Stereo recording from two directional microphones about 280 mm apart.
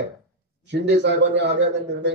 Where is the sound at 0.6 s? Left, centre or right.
Right.